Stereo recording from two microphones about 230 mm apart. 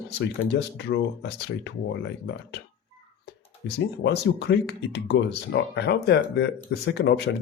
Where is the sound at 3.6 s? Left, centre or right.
Left.